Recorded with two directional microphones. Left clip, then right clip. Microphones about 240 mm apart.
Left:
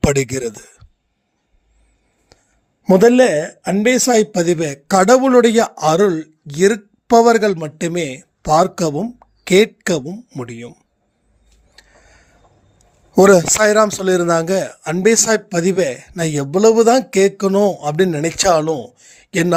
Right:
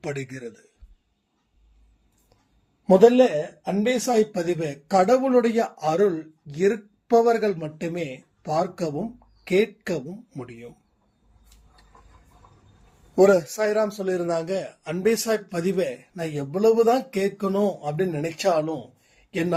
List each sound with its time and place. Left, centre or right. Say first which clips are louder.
0.0 s speech: left 15 dB; left
2.8 s speech: left 5 dB; left
13.1 s speech: left 8 dB; left